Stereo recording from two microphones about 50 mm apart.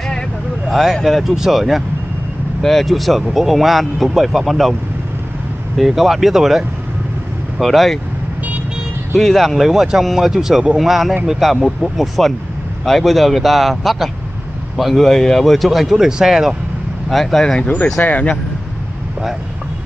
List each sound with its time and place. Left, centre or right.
0.7 s speech: centre
5.8 s speech: centre
7.6 s speech: centre
9.1 s speech: centre
17.1 s speech: centre
17.6 s speech: centre
18.0 s speech: left